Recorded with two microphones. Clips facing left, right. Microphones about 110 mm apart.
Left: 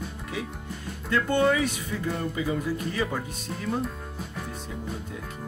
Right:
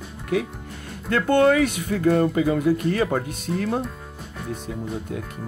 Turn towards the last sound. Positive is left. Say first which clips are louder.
# right 6 dB
turn(degrees=-60)  # may be behind; listen again after turning